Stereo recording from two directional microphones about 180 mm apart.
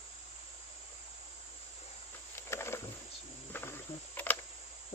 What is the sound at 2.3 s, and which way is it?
Wild animals, 15° left (ahead or behind).